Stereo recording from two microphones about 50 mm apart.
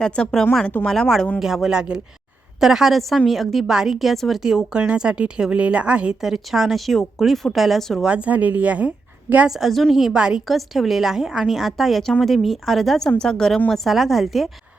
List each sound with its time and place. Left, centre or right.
0.0 s speech: centre
1.4 s a woman's voice: centre
4.9 s a woman's voice: centre
6.2 s a woman's voice: centre
8.0 s a woman's voice: right
9.5 s a woman's voice: centre
10.2 s speech: centre
10.4 s a woman's voice: centre